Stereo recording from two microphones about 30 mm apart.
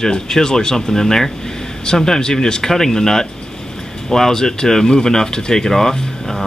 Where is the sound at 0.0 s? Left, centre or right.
Centre.